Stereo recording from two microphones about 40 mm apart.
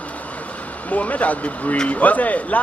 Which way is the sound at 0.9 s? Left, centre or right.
Left.